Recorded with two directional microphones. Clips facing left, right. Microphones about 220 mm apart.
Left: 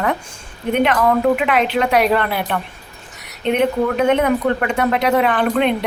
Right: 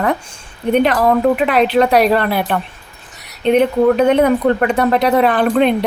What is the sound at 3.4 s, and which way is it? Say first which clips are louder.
Speech: right 5 dB; 35° right (ahead or behind).